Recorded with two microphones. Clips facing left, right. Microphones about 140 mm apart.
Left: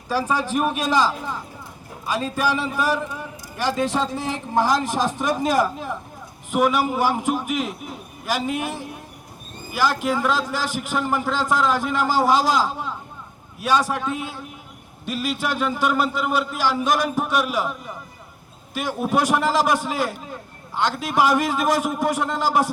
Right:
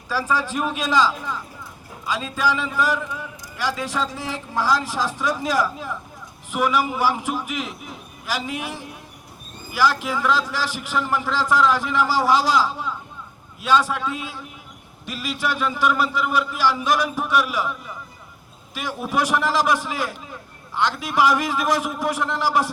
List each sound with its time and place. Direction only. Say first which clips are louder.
0.1 s a man's voice: left 1 dB; 15° left (ahead or behind)
5.3 s a man's voice: left 4 dB; 50° left (ahead or behind)
13.7 s a man's voice: right 1 dB; 15° left (ahead or behind)
15.0 s a man's voice: left 2 dB; 50° left (ahead or behind)